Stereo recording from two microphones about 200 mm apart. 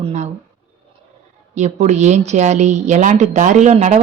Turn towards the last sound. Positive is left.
turn(degrees=-35)  # may be behind; listen again after turning